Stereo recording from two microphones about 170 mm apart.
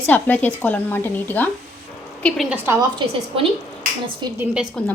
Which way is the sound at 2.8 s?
35° right (ahead or behind).